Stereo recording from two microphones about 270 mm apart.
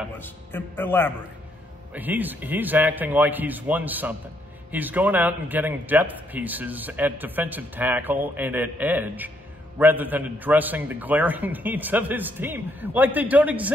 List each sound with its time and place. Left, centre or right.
0.2 s a man's voice: centre
2.0 s a man's voice: centre